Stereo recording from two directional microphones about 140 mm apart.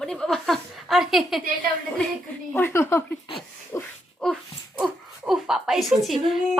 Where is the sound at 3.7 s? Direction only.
15° left (ahead or behind).